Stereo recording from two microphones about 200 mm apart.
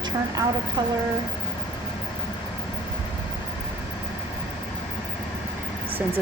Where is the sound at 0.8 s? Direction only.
25° right (ahead or behind).